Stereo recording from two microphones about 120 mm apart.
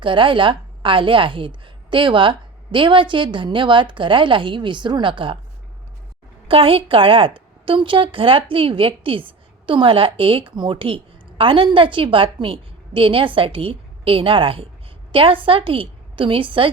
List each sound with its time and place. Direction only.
0.0 s a woman's voice: 45° right (ahead or behind)
6.5 s a woman's voice: 50° right (ahead or behind)